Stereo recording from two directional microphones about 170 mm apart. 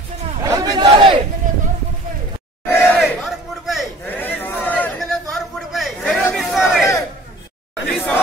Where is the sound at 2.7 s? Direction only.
10° left (ahead or behind).